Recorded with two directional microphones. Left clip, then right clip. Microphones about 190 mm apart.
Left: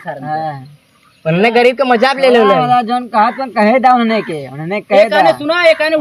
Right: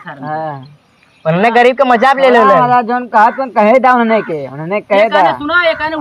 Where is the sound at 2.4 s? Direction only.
20° left (ahead or behind).